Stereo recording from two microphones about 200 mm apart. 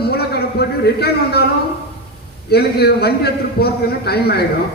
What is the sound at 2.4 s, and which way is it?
A man's voice, 50° left (ahead or behind).